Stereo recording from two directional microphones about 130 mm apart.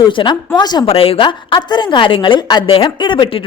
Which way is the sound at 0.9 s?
50° left (ahead or behind).